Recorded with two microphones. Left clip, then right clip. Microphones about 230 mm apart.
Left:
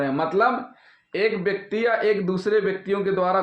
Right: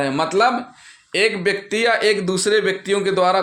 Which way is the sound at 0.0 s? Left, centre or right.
Right.